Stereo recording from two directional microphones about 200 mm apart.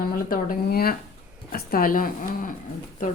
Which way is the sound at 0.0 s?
45° left (ahead or behind).